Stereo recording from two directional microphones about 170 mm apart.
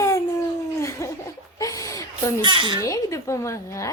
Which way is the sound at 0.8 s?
15° left (ahead or behind).